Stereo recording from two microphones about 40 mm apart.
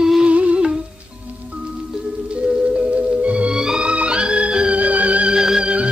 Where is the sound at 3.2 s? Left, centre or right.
Right.